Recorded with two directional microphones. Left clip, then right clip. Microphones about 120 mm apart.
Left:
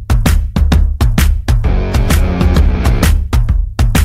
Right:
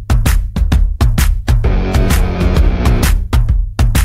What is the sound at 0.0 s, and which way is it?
Music, 45° left (ahead or behind).